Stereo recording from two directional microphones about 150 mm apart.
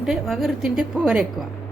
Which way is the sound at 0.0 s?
5° right (ahead or behind).